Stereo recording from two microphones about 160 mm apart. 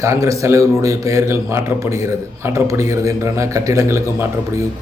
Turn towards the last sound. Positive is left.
turn(degrees=-20)  # may be behind; listen again after turning